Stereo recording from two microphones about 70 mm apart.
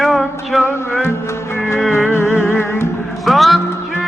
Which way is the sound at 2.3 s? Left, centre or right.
Left.